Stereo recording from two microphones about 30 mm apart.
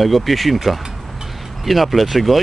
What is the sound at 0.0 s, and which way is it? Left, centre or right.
Speech, centre.